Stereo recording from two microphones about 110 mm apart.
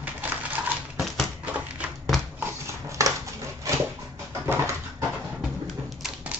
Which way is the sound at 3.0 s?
30° right (ahead or behind).